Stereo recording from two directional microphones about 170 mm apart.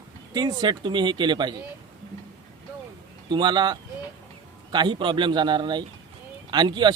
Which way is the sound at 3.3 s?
25° right (ahead or behind).